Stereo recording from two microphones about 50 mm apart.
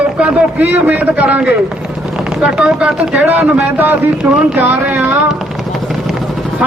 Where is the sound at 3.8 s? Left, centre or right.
Right.